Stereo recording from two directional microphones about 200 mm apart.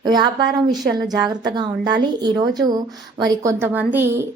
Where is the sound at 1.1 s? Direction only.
Centre (ahead or behind).